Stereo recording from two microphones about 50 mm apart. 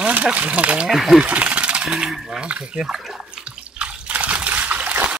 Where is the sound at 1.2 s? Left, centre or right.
Right.